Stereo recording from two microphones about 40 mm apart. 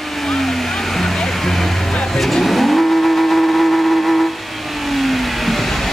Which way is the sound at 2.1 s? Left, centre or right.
Centre.